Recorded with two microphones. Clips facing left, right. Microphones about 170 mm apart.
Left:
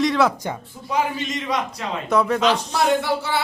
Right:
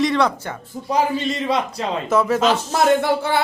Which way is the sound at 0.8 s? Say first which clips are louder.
Right 4 dB; 35° right (ahead or behind).